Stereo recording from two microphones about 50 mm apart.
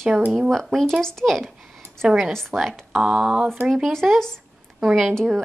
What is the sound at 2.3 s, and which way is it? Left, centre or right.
Speech, centre.